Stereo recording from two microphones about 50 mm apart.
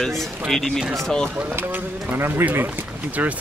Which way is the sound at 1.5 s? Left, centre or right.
Right.